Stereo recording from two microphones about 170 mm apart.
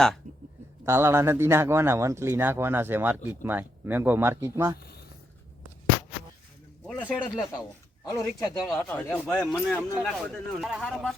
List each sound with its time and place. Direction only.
0.9 s speech: 15° right (ahead or behind)
6.8 s speech: 5° right (ahead or behind)
8.0 s speech: 20° left (ahead or behind); by 11.1 s centre (ahead or behind)